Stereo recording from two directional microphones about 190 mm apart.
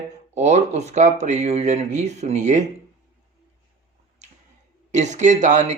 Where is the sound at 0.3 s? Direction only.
35° right (ahead or behind).